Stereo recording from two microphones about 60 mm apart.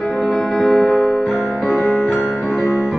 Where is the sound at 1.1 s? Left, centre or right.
Centre.